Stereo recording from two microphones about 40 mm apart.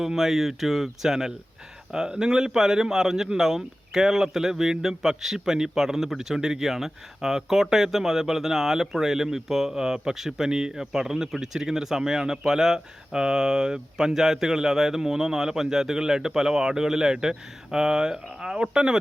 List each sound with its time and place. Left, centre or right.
0.0 s a man's voice: centre